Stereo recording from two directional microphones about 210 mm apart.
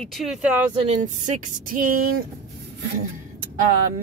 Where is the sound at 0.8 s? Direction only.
35° right (ahead or behind).